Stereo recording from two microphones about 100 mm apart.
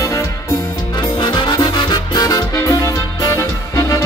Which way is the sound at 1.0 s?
50° left (ahead or behind).